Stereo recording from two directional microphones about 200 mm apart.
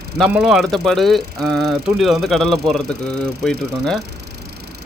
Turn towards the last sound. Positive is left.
turn(degrees=5)  # may be behind; listen again after turning